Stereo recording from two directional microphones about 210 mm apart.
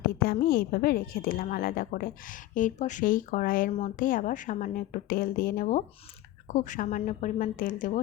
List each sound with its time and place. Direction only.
0.3 s speech: 45° left (ahead or behind)